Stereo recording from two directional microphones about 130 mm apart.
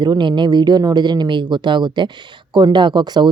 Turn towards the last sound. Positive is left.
turn(degrees=-35)  # may be behind; listen again after turning